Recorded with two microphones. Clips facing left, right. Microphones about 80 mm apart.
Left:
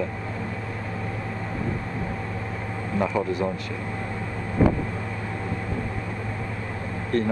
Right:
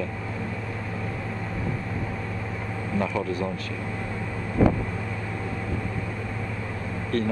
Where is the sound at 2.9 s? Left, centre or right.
Centre.